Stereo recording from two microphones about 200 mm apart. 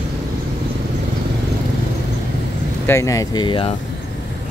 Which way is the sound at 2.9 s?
15° left (ahead or behind).